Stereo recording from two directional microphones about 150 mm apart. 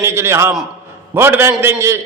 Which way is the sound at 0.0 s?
15° right (ahead or behind).